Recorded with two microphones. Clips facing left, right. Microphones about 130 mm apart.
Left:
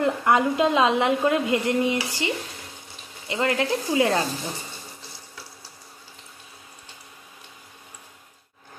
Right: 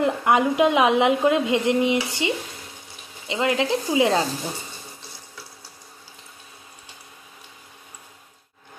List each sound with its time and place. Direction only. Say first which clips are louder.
0.0 s a woman's voice: right 1 dB; 20° right (ahead or behind)